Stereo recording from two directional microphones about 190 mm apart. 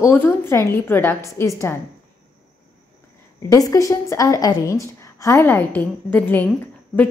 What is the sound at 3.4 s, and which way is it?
A woman's voice, 20° left (ahead or behind).